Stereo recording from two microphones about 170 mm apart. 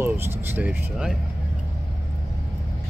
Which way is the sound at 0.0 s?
10° right (ahead or behind).